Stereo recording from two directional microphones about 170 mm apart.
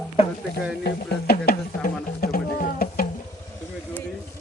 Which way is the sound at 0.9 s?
65° left (ahead or behind).